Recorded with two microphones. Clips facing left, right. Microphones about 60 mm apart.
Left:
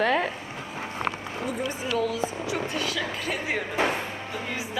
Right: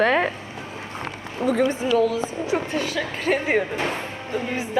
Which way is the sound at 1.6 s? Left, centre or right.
Right.